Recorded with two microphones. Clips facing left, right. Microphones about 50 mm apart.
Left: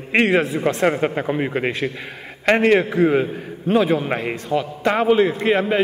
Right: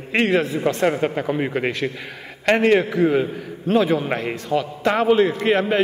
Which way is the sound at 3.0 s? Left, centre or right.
Left.